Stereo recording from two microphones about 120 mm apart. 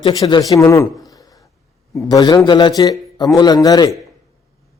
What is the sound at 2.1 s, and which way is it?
A man's voice, 35° left (ahead or behind).